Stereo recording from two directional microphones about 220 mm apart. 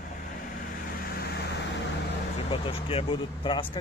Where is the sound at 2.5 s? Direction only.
25° left (ahead or behind).